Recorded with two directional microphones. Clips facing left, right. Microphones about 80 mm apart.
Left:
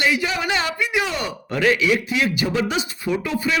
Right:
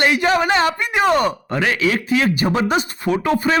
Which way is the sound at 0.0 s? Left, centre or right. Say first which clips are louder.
Right 5 dB; right.